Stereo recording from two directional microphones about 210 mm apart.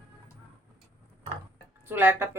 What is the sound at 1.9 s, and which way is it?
Speech, 10° right (ahead or behind).